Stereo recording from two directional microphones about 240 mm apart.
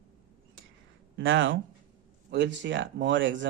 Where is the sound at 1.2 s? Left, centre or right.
Right.